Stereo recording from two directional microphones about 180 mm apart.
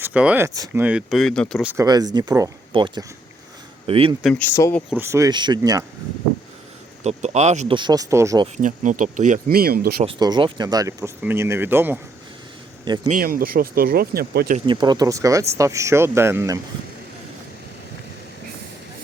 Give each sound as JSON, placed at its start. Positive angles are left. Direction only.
{"t": 0.0, "sound": "speech", "side_deg": -5}
{"t": 1.6, "sound": "speech", "side_deg": -15}
{"t": 4.2, "sound": "speech", "side_deg": 5}
{"t": 4.9, "sound": "speech", "side_deg": -15}
{"t": 7.0, "sound": "speech", "side_deg": -40}
{"t": 7.8, "sound": "speech", "side_deg": -20}
{"t": 8.5, "sound": "speech", "side_deg": -45}
{"t": 10.2, "sound": "speech", "side_deg": -25}
{"t": 13.1, "sound": "speech", "side_deg": -50}
{"t": 14.7, "sound": "speech", "side_deg": -25}